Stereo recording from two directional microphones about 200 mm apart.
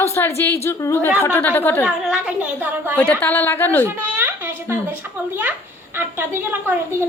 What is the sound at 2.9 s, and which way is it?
Speech, 10° left (ahead or behind).